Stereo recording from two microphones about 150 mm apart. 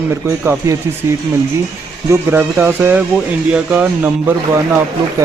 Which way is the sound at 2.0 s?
15° right (ahead or behind).